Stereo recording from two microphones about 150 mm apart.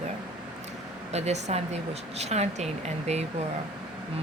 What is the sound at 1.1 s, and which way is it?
Speech, 45° right (ahead or behind).